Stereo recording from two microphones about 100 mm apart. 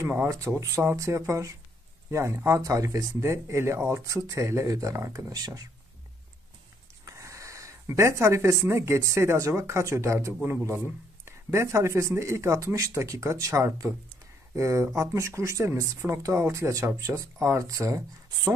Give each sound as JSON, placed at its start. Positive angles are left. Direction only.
{"t": 0.0, "sound": "speech", "side_deg": -25}
{"t": 7.1, "sound": "speech", "side_deg": -30}